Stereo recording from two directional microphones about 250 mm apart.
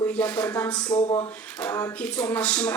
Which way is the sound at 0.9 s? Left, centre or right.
Centre.